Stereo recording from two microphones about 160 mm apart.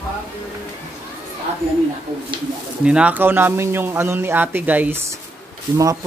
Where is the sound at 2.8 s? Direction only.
5° right (ahead or behind).